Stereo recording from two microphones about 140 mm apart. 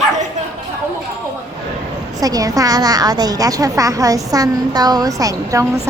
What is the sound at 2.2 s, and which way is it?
A woman's voice, 25° right (ahead or behind).